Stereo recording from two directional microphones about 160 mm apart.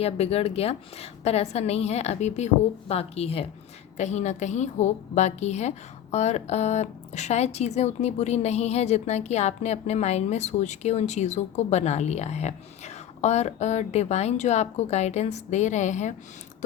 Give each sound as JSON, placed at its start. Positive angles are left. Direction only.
{"t": 0.0, "sound": "a woman's voice", "side_deg": 40}